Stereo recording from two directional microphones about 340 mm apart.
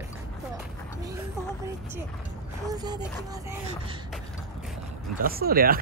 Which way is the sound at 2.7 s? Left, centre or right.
Centre.